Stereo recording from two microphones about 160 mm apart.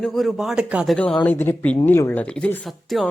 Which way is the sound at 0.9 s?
10° left (ahead or behind).